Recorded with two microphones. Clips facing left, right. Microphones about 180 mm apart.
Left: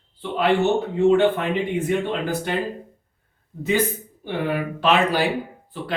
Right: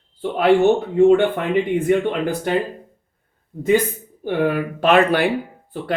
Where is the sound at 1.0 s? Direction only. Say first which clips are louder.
Right 4 dB; 55° right (ahead or behind).